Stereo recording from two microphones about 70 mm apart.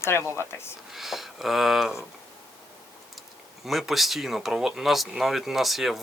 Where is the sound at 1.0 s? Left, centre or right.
Centre.